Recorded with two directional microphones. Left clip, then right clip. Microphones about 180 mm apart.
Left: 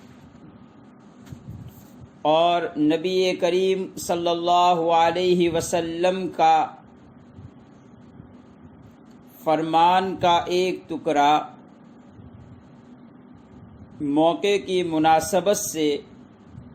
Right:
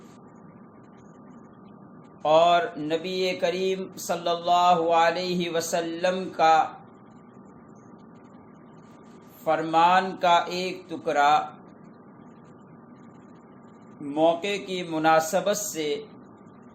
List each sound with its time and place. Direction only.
2.2 s mantra: 30° left (ahead or behind)
9.4 s mantra: 35° left (ahead or behind)
14.1 s mantra: 35° left (ahead or behind)